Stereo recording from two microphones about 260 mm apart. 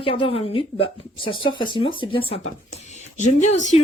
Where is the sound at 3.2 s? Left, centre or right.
Left.